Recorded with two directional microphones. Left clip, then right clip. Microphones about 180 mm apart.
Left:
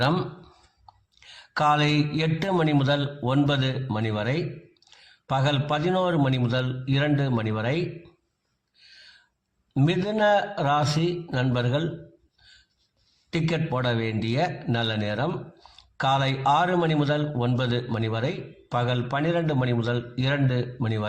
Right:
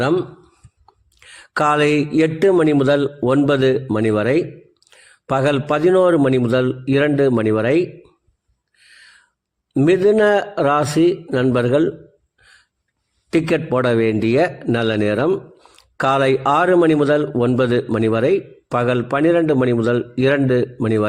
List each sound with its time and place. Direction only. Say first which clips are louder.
1.2 s a man's voice: right 6 dB; 45° right (ahead or behind)
8.9 s a sound: right 5 dB; 50° right (ahead or behind)
9.7 s a man's voice: right 12 dB; 45° right (ahead or behind)
13.3 s a man's voice: right 10 dB; 50° right (ahead or behind)